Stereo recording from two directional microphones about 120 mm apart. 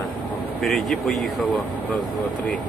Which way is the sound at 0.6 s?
Centre (ahead or behind).